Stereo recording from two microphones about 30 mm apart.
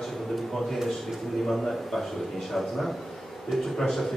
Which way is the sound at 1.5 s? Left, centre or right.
Centre.